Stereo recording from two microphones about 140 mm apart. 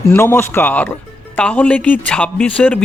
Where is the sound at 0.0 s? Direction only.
20° left (ahead or behind).